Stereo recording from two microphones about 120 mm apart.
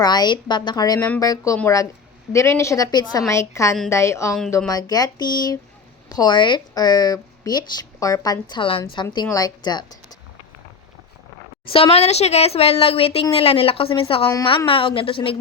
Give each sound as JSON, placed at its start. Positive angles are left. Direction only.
{"t": 0.0, "sound": "a woman's voice", "side_deg": 35}
{"t": 9.3, "sound": "a woman's voice", "side_deg": 35}
{"t": 11.7, "sound": "speech", "side_deg": 55}